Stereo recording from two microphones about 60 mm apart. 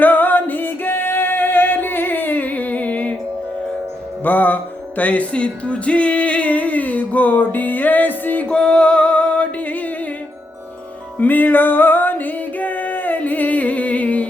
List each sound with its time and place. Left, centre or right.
0.0 s music: left
4.2 s music: left
8.4 s music: centre
11.2 s music: left